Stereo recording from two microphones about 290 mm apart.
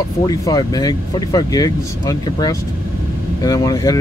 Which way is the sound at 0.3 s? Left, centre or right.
Centre.